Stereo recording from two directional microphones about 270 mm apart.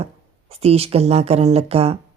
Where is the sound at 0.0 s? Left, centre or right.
Right.